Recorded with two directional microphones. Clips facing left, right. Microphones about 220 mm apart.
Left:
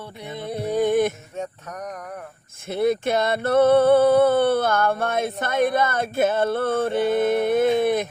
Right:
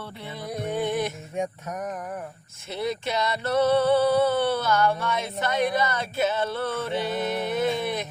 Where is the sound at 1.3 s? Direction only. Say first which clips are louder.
Right 2 dB; 10° right (ahead or behind).